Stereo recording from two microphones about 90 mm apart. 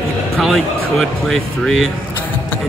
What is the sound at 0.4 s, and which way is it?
Speech, centre (ahead or behind).